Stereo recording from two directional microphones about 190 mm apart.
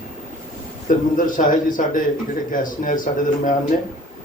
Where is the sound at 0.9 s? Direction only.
45° left (ahead or behind).